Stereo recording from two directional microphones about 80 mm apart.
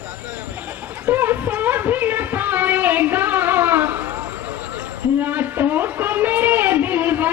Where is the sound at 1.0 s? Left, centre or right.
Right.